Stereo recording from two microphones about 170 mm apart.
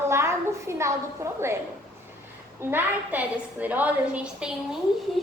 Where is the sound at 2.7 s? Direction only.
10° right (ahead or behind).